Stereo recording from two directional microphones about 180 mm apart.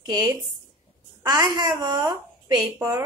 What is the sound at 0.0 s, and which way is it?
A woman's voice, 20° right (ahead or behind).